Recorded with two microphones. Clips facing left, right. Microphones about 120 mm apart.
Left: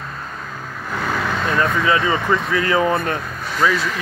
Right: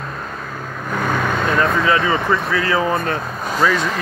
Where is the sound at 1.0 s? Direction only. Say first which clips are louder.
Right 2 dB; 25° right (ahead or behind).